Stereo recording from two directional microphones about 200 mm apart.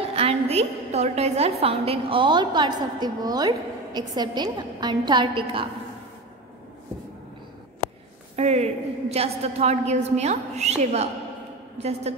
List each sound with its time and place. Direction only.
0.1 s a woman's voice: 30° right (ahead or behind)
8.4 s a woman's voice: 35° right (ahead or behind)